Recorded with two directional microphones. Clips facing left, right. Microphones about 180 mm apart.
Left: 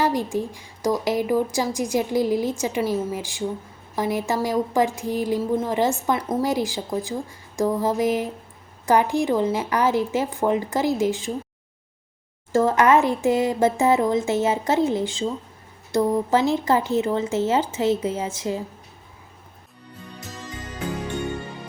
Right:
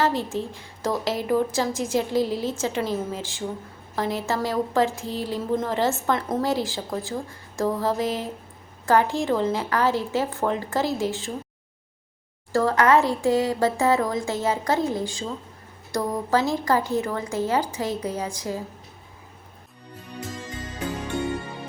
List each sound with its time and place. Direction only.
0.0 s a woman's voice: 15° left (ahead or behind)
12.5 s speech: 20° left (ahead or behind)